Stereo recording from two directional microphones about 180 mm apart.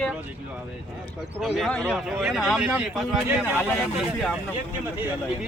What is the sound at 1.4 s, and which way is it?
Speech, centre (ahead or behind).